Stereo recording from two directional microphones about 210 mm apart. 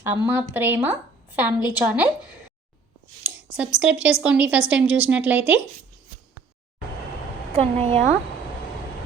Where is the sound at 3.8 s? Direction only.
5° right (ahead or behind).